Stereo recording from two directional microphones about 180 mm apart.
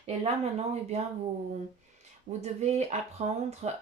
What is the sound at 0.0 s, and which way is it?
Speech, 35° right (ahead or behind).